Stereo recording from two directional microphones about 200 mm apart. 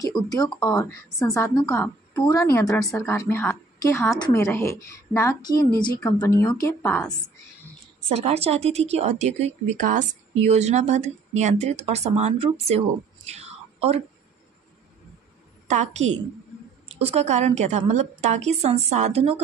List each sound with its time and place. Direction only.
0.3 s a woman's voice: 20° left (ahead or behind)
8.1 s speech: 30° right (ahead or behind)
15.7 s speech: 35° right (ahead or behind)